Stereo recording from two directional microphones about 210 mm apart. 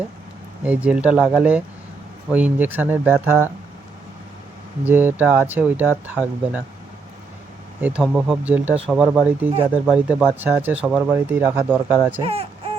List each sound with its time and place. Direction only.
0.6 s speech: 5° right (ahead or behind)
4.9 s speech: 10° right (ahead or behind)
7.8 s speech: 5° right (ahead or behind)
12.2 s a sound: 25° right (ahead or behind)